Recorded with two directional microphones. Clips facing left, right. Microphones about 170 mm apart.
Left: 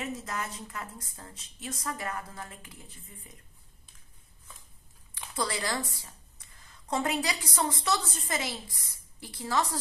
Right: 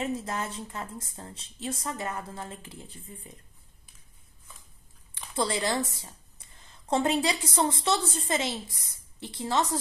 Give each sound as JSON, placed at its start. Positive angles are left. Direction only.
{"t": 0.0, "sound": "a woman's voice", "side_deg": -30}
{"t": 5.3, "sound": "a woman's voice", "side_deg": -25}